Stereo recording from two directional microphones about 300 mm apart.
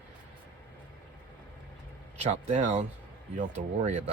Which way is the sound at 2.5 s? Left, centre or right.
Right.